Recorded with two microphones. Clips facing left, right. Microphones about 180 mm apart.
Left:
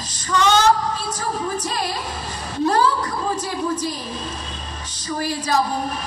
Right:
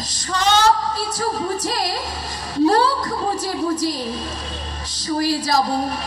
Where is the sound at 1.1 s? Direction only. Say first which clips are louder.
Right 2 dB; 35° right (ahead or behind).